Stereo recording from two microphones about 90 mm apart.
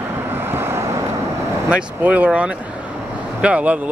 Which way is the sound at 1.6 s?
15° right (ahead or behind).